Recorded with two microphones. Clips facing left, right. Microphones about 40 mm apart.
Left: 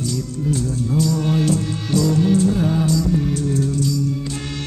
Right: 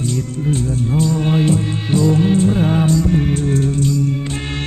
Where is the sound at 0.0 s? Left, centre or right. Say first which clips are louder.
Right 3 dB; right.